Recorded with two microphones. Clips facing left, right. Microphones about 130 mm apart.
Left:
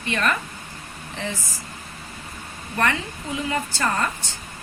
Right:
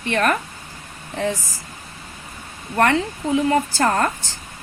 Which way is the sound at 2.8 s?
60° right (ahead or behind).